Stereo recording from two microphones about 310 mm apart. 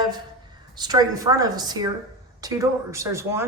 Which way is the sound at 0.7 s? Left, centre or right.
Centre.